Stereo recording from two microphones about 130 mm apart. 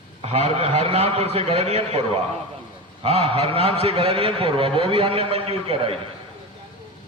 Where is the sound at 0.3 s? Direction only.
55° right (ahead or behind).